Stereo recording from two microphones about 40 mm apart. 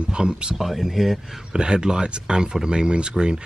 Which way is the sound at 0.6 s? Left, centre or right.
Centre.